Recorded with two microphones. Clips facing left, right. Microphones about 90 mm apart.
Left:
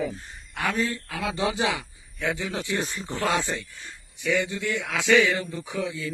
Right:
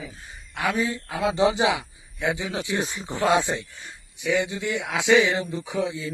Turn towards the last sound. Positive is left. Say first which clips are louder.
# right 3 dB
turn(degrees=-20)  # may be behind; listen again after turning